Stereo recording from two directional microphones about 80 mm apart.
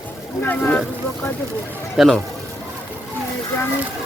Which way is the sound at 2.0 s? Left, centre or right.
Centre.